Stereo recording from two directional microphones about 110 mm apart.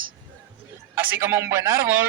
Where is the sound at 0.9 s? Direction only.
15° right (ahead or behind).